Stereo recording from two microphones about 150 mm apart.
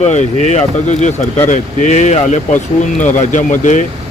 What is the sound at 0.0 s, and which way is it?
Speech, 50° left (ahead or behind).